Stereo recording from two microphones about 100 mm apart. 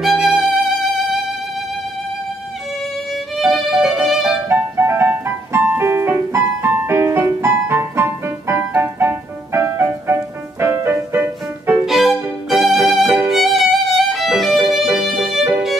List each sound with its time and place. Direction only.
0.0 s music: centre (ahead or behind)
3.3 s violin: centre (ahead or behind)
4.5 s music: 25° right (ahead or behind)
11.8 s violin: centre (ahead or behind)